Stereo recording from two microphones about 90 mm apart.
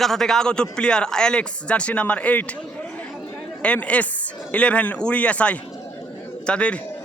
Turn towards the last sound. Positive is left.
turn(degrees=10)  # may be behind; listen again after turning